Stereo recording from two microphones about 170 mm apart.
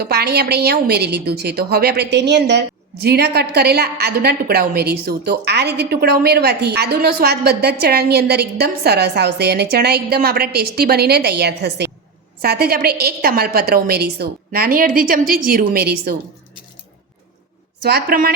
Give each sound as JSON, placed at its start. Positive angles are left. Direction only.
{"t": 0.0, "sound": "a woman's voice", "side_deg": -70}
{"t": 17.8, "sound": "a woman's voice", "side_deg": -65}